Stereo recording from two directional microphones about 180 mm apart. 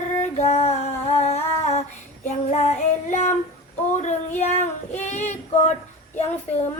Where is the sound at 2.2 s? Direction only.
35° left (ahead or behind).